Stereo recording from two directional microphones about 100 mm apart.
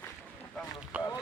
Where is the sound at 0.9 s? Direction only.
15° right (ahead or behind).